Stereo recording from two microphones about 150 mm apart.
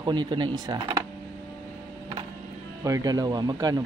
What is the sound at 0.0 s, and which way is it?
Speech, 30° right (ahead or behind).